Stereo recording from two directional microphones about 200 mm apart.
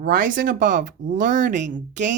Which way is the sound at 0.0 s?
45° right (ahead or behind).